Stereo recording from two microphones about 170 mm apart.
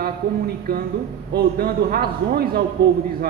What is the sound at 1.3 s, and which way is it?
A man's voice, 65° right (ahead or behind).